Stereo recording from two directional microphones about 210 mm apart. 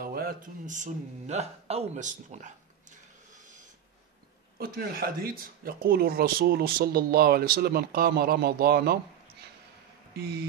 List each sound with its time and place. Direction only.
0.0 s speech: 45° right (ahead or behind)
4.6 s speech: 45° right (ahead or behind)
10.1 s speech: 50° right (ahead or behind)